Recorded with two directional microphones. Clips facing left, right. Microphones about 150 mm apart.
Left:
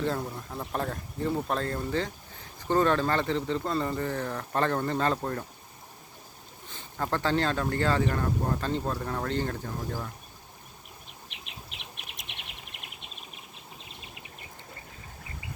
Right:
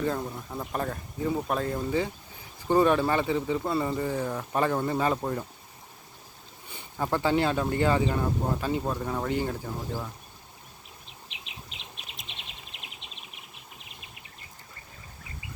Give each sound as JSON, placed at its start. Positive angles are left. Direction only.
{"t": 0.0, "sound": "speech", "side_deg": -5}
{"t": 6.7, "sound": "speech", "side_deg": -10}
{"t": 11.8, "sound": "insect", "side_deg": 60}